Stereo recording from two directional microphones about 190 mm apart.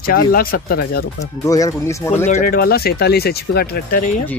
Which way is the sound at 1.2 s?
20° left (ahead or behind).